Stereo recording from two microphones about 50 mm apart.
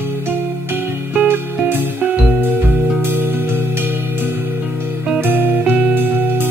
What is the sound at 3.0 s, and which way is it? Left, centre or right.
Music, right.